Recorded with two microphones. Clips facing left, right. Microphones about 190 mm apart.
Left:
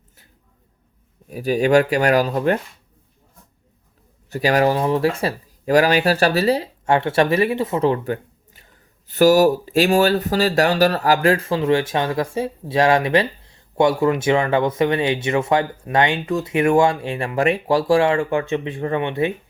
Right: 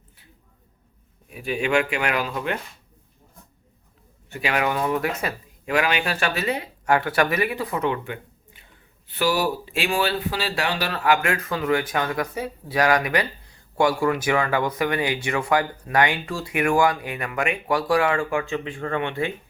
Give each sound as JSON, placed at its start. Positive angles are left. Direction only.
{"t": 1.3, "sound": "speech", "side_deg": 40}
{"t": 4.3, "sound": "speech", "side_deg": 40}